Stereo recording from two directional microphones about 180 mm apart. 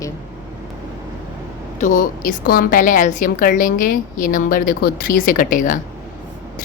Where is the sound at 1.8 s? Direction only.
45° left (ahead or behind).